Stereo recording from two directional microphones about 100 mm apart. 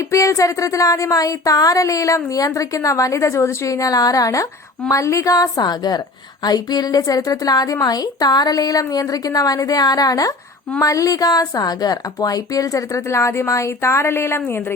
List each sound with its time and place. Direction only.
0.0 s speech: 30° left (ahead or behind)